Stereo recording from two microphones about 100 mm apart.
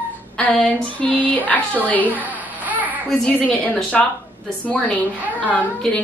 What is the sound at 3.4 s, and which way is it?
A woman's voice, 15° left (ahead or behind).